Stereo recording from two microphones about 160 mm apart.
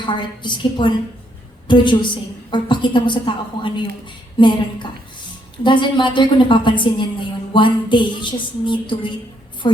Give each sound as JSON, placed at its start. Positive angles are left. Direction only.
{"t": 0.0, "sound": "a woman's voice", "side_deg": 30}